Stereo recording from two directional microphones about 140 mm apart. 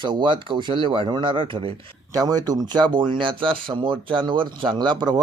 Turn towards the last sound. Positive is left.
turn(degrees=-30)  # may be behind; listen again after turning